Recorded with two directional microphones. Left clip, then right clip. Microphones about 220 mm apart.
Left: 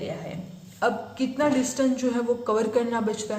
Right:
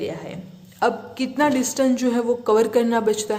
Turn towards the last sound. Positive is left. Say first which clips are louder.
# right 7 dB
turn(degrees=-50)  # may be behind; listen again after turning